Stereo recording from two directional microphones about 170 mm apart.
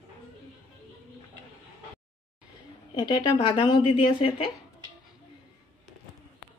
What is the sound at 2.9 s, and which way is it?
Speech, 25° left (ahead or behind).